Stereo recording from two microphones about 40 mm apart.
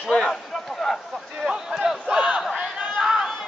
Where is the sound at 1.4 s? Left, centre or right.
Centre.